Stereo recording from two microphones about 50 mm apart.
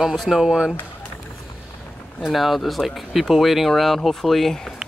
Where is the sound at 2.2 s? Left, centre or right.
Centre.